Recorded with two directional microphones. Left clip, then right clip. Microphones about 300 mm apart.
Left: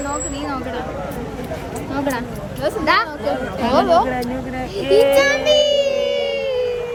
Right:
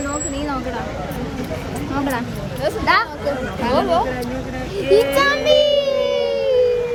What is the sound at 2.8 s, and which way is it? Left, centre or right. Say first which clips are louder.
Speech: even; centre.